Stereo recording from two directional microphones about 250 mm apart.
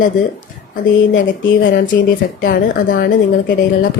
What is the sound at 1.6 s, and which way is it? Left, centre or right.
Speech, left.